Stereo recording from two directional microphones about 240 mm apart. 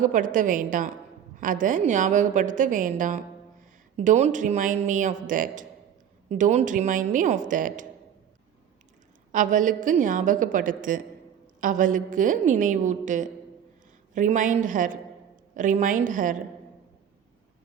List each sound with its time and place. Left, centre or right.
0.0 s a woman's voice: right
9.3 s a woman's voice: right